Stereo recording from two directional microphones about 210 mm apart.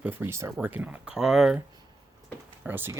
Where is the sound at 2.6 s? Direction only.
10° right (ahead or behind).